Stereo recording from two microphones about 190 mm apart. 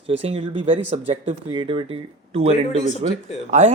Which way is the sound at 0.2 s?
30° right (ahead or behind).